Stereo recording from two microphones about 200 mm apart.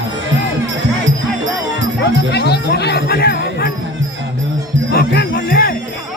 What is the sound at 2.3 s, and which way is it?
Jingle bell, 55° left (ahead or behind).